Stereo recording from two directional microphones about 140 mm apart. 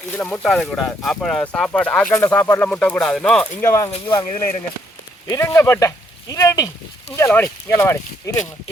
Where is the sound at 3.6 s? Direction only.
20° left (ahead or behind).